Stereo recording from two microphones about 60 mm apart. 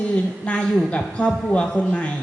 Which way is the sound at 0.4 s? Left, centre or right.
Centre.